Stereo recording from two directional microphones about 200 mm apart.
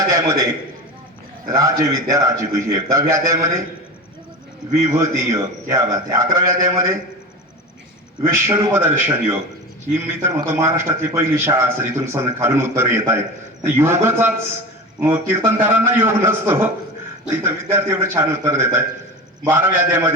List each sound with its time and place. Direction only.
1.5 s a man's voice: 20° right (ahead or behind)
4.9 s a man's voice: 15° right (ahead or behind)
8.2 s a man's voice: 15° right (ahead or behind)